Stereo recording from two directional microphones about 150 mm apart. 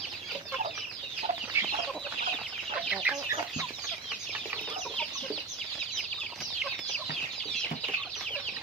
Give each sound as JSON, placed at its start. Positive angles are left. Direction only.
{"t": 1.6, "sound": "chicken", "side_deg": -15}
{"t": 2.9, "sound": "chicken", "side_deg": -5}